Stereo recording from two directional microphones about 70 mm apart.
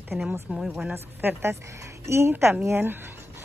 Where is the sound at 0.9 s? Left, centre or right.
Right.